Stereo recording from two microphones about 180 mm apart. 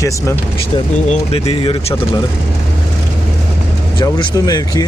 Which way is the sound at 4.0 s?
25° left (ahead or behind).